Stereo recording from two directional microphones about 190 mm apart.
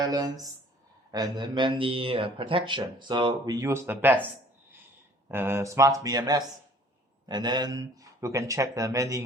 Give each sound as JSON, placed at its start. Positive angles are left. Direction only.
{"t": 0.0, "sound": "speech", "side_deg": -20}
{"t": 5.3, "sound": "speech", "side_deg": -10}